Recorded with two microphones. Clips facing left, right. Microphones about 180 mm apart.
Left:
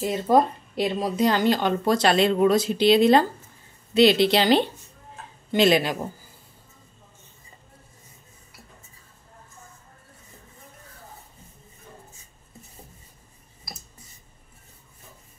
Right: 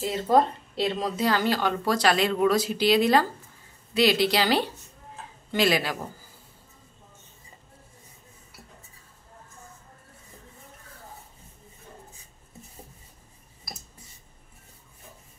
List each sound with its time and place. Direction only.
0.0 s speech: 15° left (ahead or behind)